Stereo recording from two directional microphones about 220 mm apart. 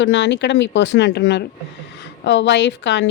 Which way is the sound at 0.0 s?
55° left (ahead or behind).